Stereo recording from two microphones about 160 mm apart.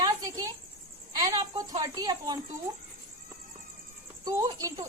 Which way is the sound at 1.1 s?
25° right (ahead or behind).